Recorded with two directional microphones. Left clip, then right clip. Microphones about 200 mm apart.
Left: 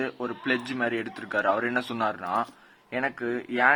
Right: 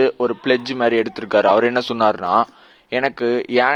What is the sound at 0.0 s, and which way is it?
Speech, 35° right (ahead or behind).